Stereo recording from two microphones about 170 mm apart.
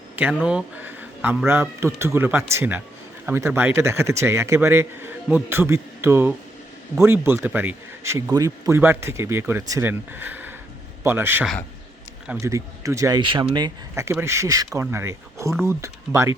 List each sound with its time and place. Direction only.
0.4 s a man's voice: 10° right (ahead or behind)